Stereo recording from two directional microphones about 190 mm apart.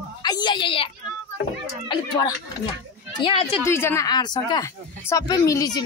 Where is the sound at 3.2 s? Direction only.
25° left (ahead or behind).